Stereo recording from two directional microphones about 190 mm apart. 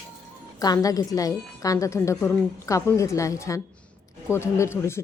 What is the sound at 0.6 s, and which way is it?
A woman's voice, 20° left (ahead or behind).